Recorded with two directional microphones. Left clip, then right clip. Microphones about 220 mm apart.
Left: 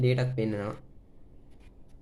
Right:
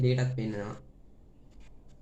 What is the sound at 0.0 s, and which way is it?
Speech, 50° left (ahead or behind).